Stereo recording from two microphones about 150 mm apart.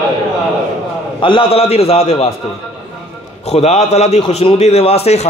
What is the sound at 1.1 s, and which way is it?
A man's voice, 35° left (ahead or behind).